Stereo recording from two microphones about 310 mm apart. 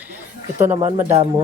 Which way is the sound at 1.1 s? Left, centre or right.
Centre.